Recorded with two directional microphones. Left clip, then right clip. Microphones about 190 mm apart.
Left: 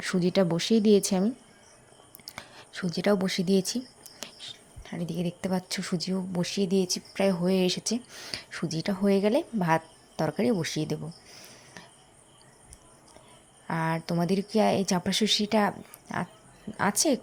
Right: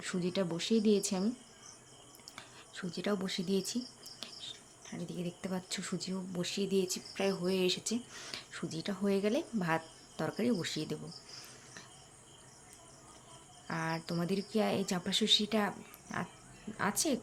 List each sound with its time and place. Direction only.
0.0 s speech: 35° left (ahead or behind)
13.7 s speech: 30° left (ahead or behind)